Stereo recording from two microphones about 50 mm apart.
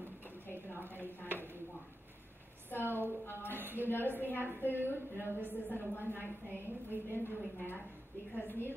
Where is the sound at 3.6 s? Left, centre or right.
Right.